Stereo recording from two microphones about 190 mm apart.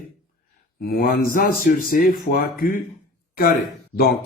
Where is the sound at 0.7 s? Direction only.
50° left (ahead or behind).